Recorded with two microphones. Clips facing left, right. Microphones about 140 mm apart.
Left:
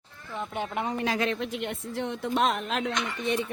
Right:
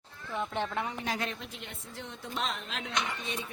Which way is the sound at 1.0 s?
90° left.